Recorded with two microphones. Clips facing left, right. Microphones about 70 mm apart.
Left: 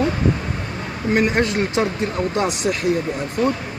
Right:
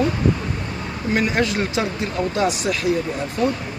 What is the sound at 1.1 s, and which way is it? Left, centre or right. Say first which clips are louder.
Speech: left 2 dB; left.